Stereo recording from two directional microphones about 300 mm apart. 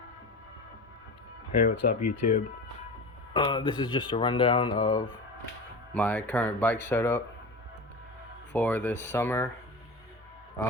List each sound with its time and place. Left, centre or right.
1.5 s speech: left
3.3 s speech: centre
8.5 s speech: centre
10.6 s speech: centre